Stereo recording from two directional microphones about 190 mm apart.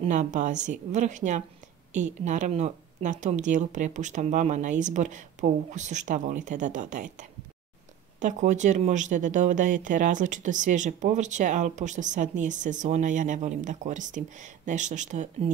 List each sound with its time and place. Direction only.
0.0 s speech: 40° right (ahead or behind)